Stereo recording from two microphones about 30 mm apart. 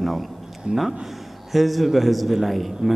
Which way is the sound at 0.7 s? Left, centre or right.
Right.